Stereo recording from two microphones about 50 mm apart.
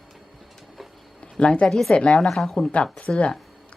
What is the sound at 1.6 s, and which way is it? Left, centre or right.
A woman's voice, centre.